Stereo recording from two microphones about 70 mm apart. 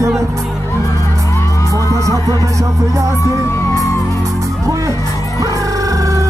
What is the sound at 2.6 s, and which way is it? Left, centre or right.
Music, right.